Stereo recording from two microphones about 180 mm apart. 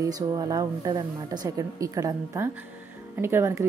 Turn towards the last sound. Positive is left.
turn(degrees=-15)  # may be behind; listen again after turning